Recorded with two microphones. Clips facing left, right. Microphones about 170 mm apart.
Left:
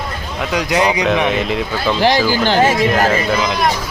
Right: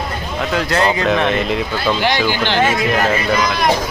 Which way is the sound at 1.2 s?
Centre (ahead or behind).